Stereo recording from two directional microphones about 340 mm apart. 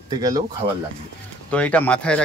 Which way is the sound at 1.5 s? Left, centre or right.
Centre.